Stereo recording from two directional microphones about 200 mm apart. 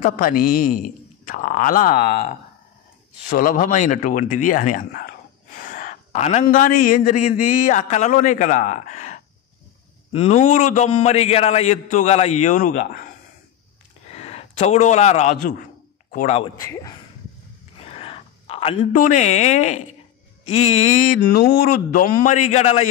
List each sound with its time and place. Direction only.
0.0 s a man's voice: 45° left (ahead or behind)
14.1 s a man's voice: 30° left (ahead or behind)
16.3 s speech: 20° left (ahead or behind)
17.7 s a sound: 30° left (ahead or behind)
20.4 s speech: 35° left (ahead or behind)